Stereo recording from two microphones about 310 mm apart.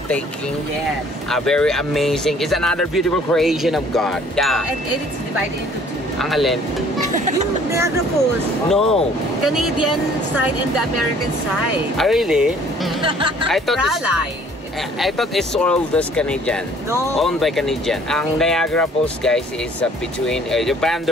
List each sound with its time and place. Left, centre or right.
1.3 s speech: centre
6.1 s speech: centre
7.2 s speech: right
8.6 s speech: centre
12.0 s speech: centre
13.0 s speech: centre
13.5 s speech: centre